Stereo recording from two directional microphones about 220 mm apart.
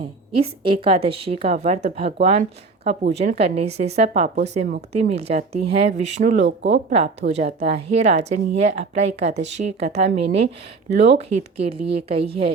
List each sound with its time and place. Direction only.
0.6 s speech: 25° right (ahead or behind)